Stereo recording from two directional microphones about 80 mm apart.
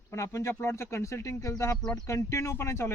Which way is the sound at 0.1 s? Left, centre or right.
Left.